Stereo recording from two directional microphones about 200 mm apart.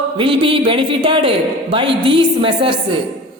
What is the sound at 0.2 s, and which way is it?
A man's voice, 25° right (ahead or behind).